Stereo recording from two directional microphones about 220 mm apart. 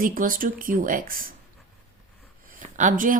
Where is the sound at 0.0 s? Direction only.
40° right (ahead or behind).